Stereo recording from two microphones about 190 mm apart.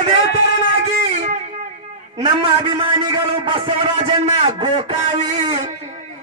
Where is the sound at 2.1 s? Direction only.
25° right (ahead or behind).